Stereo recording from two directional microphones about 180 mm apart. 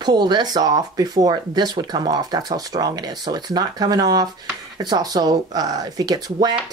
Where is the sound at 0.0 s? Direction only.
25° right (ahead or behind).